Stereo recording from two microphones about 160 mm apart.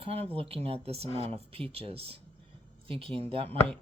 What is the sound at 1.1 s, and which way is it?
Speech, 40° left (ahead or behind).